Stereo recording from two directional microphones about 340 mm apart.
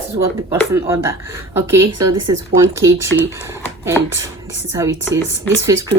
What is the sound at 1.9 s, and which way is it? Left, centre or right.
Speech, right.